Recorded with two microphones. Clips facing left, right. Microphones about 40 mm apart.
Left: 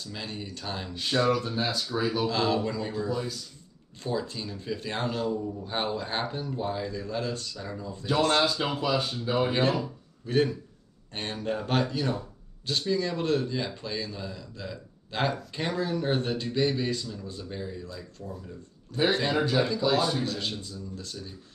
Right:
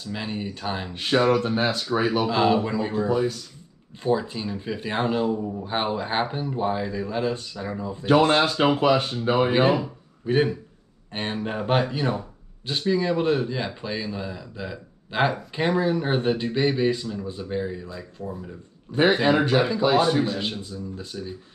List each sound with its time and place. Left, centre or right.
0.0 s speech: right
0.9 s speech: right
2.2 s speech: right
4.0 s speech: right
8.5 s speech: right
19.1 s speech: right
20.2 s speech: right